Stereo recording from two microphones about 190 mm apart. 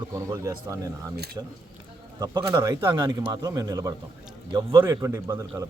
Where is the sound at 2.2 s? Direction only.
20° right (ahead or behind).